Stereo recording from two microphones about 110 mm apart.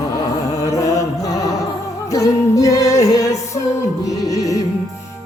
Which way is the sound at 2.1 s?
30° left (ahead or behind).